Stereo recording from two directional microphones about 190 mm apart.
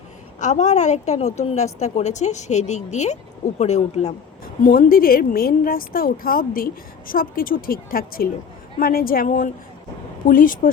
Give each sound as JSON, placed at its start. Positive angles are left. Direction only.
{"t": 0.3, "sound": "a woman's voice", "side_deg": 40}
{"t": 4.6, "sound": "a woman's voice", "side_deg": 45}